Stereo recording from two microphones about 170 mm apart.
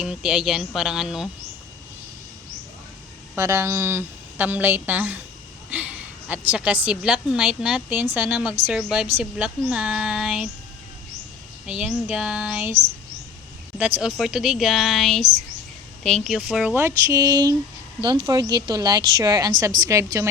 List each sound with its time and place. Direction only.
0.0 s a woman's voice: 5° right (ahead or behind)
3.3 s a woman's voice: 15° right (ahead or behind)
11.6 s a woman's voice: 5° right (ahead or behind)